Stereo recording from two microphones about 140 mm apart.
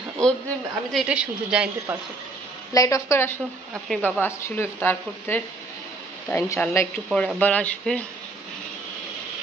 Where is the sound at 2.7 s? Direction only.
25° left (ahead or behind).